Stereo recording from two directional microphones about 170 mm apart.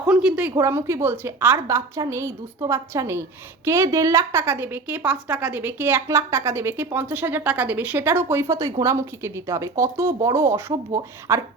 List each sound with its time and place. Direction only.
0.0 s a woman's voice: 5° right (ahead or behind)